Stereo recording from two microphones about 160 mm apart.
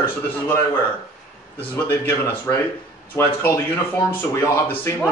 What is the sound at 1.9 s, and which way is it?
A man's voice, 15° left (ahead or behind).